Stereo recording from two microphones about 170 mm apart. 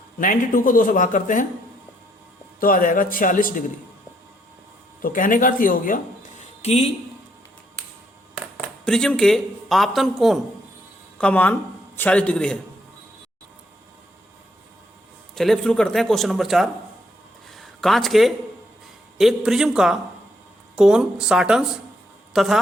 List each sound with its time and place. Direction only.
0.2 s speech: 50° left (ahead or behind)
2.6 s speech: 55° left (ahead or behind)
5.0 s speech: 50° left (ahead or behind)
6.6 s speech: 35° left (ahead or behind)
8.5 s a man's voice: 5° left (ahead or behind)
15.4 s a man's voice: 5° left (ahead or behind)